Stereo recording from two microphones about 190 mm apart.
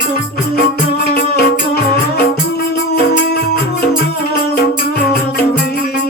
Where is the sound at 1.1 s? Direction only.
55° left (ahead or behind).